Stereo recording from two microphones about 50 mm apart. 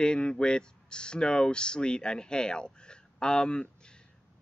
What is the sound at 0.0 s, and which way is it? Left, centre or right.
A man's voice, centre.